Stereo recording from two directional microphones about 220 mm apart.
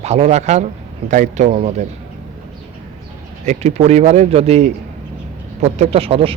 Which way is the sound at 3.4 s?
30° right (ahead or behind).